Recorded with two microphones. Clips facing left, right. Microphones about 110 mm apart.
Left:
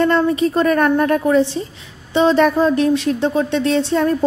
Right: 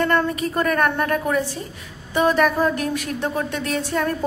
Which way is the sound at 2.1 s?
25° left (ahead or behind).